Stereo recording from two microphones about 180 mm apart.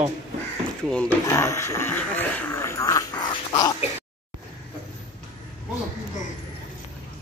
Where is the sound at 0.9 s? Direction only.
5° left (ahead or behind).